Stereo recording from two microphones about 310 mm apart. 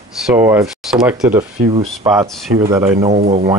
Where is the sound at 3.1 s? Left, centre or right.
Right.